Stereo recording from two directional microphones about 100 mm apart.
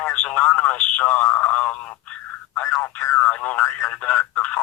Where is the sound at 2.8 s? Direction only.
20° left (ahead or behind).